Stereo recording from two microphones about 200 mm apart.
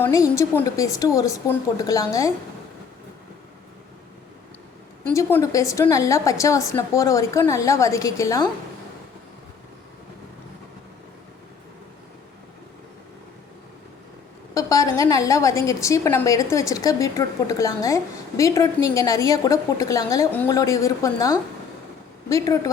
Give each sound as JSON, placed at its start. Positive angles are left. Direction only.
{"t": 0.0, "sound": "a woman's voice", "side_deg": 15}
{"t": 5.0, "sound": "a woman's voice", "side_deg": 15}
{"t": 14.5, "sound": "a woman's voice", "side_deg": 15}